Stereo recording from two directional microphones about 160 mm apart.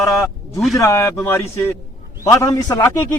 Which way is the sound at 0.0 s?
20° left (ahead or behind).